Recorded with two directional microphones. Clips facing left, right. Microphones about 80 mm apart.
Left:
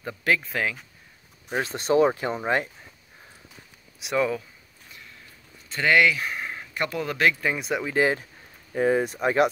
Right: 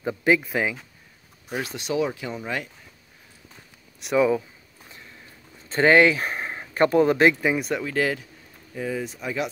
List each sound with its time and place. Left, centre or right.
0.0 s speech: centre
1.6 s speech: left
4.0 s speech: centre
5.7 s speech: right
7.4 s speech: centre
7.7 s speech: centre
8.7 s speech: left